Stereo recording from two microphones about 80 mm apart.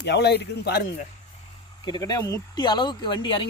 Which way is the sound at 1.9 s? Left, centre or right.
Left.